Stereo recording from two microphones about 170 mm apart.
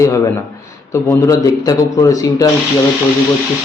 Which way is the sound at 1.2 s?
20° left (ahead or behind).